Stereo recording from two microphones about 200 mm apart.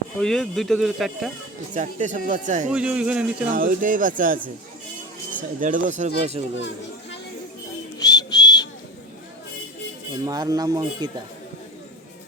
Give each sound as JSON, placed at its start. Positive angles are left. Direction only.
{"t": 0.2, "sound": "speech", "side_deg": 0}
{"t": 1.7, "sound": "speech", "side_deg": -35}
{"t": 2.7, "sound": "speech", "side_deg": -5}
{"t": 3.5, "sound": "speech", "side_deg": -45}
{"t": 5.4, "sound": "speech", "side_deg": -40}
{"t": 8.0, "sound": "whistle", "side_deg": 20}
{"t": 10.2, "sound": "speech", "side_deg": -20}